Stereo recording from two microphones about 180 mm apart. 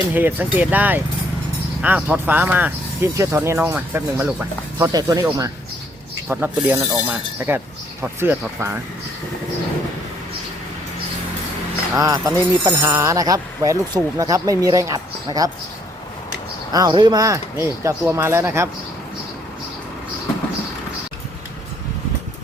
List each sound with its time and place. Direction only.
0.1 s speech: 10° right (ahead or behind)
11.9 s speech: 20° right (ahead or behind)
16.7 s speech: 25° right (ahead or behind)